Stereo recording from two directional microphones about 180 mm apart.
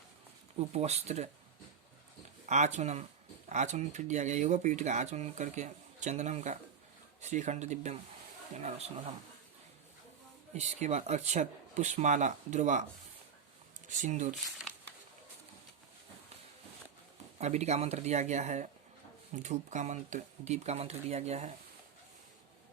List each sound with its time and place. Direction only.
0.6 s speech: 35° right (ahead or behind)
2.5 s speech: 40° right (ahead or behind)
10.5 s speech: 40° right (ahead or behind)
14.0 s speech: 40° right (ahead or behind)
17.3 s speech: 40° right (ahead or behind)